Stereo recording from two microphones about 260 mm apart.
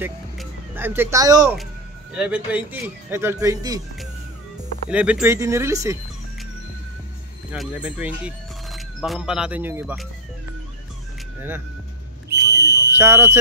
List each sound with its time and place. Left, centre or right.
0.0 s speech: centre
4.8 s speech: centre
7.5 s speech: centre
12.5 s a sound: right
12.9 s speech: centre